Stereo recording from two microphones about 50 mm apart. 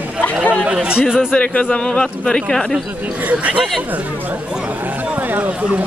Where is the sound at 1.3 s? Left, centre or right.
Left.